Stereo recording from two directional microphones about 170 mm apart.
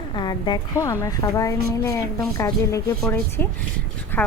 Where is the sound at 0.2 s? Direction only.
25° left (ahead or behind).